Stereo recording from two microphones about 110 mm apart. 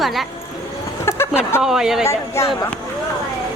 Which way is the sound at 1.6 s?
5° right (ahead or behind).